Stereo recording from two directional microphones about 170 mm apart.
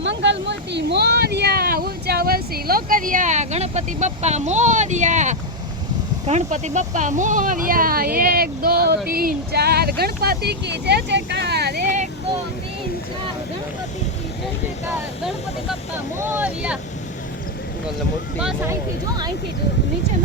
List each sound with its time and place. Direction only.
0.0 s a sound: 90° right; by 5.4 s 45° right (ahead or behind)
6.2 s speech: 45° right (ahead or behind); by 11.8 s 70° right (ahead or behind)
16.1 s speech: 15° right (ahead or behind)
18.3 s speech: 5° right (ahead or behind)
18.7 s speech: 25° right (ahead or behind)